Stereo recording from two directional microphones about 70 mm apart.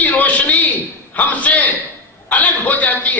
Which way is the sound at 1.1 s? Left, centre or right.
Left.